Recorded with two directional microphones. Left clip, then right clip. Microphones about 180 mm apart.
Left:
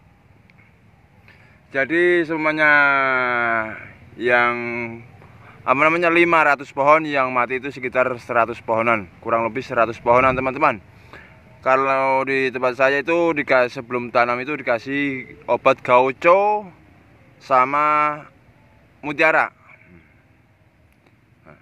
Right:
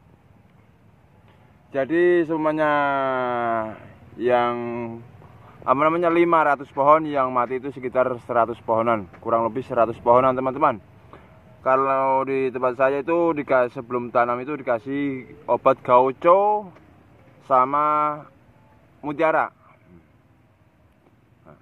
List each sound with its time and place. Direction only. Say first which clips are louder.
1.7 s speech: left 2 dB; 15° right (ahead or behind)
5.6 s a man's voice: left 3 dB; 5° left (ahead or behind)
18.9 s a sound: left 4 dB; 5° left (ahead or behind)